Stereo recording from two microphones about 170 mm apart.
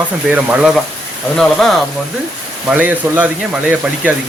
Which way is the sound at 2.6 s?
10° right (ahead or behind).